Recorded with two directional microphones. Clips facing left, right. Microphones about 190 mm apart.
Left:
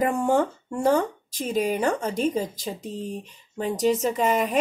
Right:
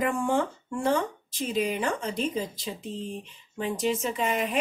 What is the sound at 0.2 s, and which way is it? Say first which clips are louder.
Speech: left 4 dB; 40° left (ahead or behind).